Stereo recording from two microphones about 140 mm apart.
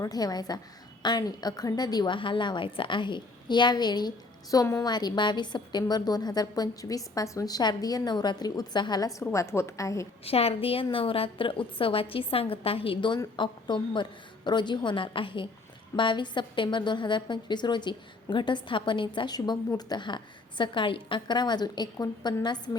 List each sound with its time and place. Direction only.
0.0 s a woman's voice: 30° left (ahead or behind)
10.2 s a woman's voice: 45° left (ahead or behind)